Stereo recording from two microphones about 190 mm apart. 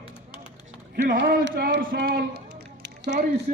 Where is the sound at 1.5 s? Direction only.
50° right (ahead or behind).